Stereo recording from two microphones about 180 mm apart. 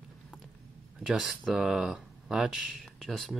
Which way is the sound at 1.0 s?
5° right (ahead or behind).